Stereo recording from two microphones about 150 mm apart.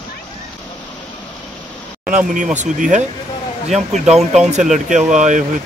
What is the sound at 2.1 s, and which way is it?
Speech, 60° right (ahead or behind).